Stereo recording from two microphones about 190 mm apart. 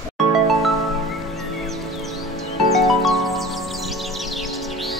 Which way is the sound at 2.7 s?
Centre (ahead or behind).